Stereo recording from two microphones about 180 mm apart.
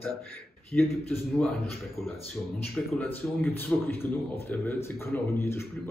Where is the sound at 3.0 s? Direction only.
10° left (ahead or behind).